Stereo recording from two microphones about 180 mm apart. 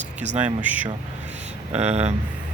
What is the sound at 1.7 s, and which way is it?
Speech, 35° right (ahead or behind).